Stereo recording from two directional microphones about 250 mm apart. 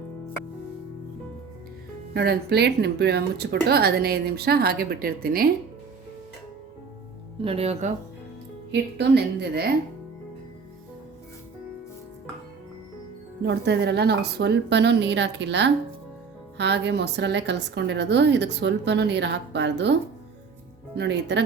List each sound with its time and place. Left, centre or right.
2.1 s speech: right
7.4 s speech: right
8.7 s speech: right
13.4 s a woman's voice: right